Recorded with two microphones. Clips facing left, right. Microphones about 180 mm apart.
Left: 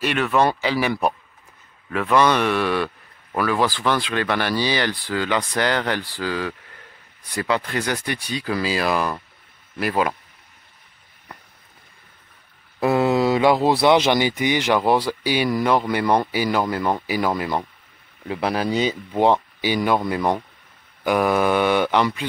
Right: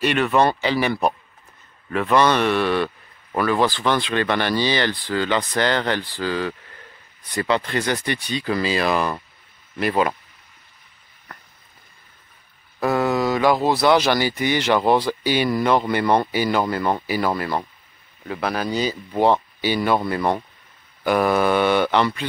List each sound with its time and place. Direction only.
0.0 s speech: centre (ahead or behind)
12.8 s speech: 25° left (ahead or behind)